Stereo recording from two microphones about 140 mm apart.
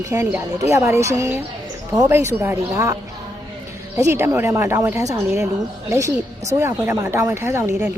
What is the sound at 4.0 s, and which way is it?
Speech, 20° right (ahead or behind).